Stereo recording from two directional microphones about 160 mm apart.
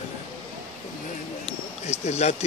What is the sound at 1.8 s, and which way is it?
Speech, 45° left (ahead or behind).